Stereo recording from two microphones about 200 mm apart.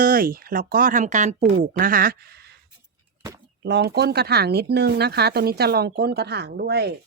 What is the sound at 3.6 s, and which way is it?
Speech, 55° right (ahead or behind).